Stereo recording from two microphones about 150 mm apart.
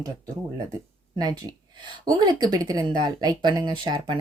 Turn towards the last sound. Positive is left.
turn(degrees=-30)  # may be behind; listen again after turning